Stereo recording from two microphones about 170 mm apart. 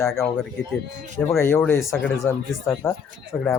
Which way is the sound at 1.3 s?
15° left (ahead or behind).